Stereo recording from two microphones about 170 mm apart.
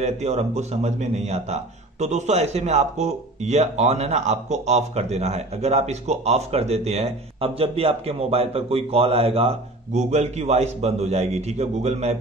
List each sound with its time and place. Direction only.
0.0 s speech: 40° right (ahead or behind)